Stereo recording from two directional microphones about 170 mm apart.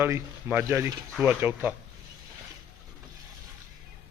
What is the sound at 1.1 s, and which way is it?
Speech, 5° right (ahead or behind).